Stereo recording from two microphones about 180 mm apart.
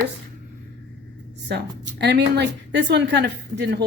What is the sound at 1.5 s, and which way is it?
A woman's voice, 70° right (ahead or behind).